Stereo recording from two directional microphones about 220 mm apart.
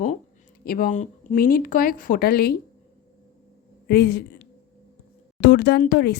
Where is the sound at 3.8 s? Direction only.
45° left (ahead or behind).